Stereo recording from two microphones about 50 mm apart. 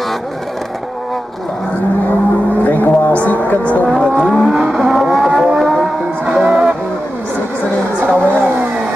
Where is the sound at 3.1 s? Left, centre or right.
Left.